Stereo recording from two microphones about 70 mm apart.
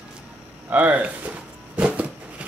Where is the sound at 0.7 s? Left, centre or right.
Right.